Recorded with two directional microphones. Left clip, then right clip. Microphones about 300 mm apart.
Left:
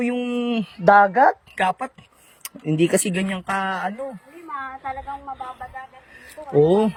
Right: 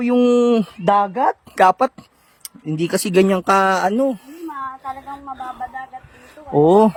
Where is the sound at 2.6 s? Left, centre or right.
Centre.